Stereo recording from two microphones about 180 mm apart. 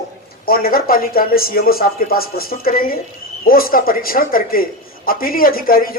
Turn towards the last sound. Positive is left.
turn(degrees=55)  # may be behind; listen again after turning